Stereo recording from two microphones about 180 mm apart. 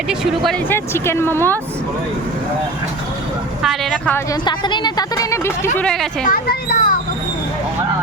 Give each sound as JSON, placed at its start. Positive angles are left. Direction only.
{"t": 0.7, "sound": "speech", "side_deg": 15}
{"t": 3.6, "sound": "a woman's voice", "side_deg": 0}
{"t": 4.3, "sound": "speech", "side_deg": 25}
{"t": 6.2, "sound": "a woman's voice", "side_deg": 55}